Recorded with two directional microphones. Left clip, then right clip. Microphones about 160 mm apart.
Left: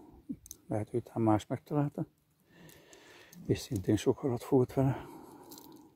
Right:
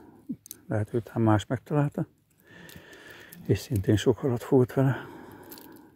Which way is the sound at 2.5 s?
10° right (ahead or behind).